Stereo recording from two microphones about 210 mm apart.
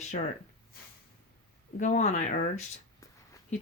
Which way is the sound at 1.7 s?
35° left (ahead or behind).